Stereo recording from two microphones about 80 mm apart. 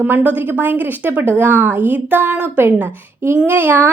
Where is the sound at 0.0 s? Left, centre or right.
Right.